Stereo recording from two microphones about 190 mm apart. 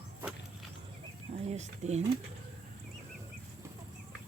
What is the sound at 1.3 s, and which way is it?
Speech, 35° right (ahead or behind).